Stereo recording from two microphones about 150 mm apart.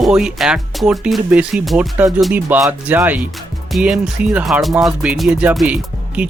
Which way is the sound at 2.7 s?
10° right (ahead or behind).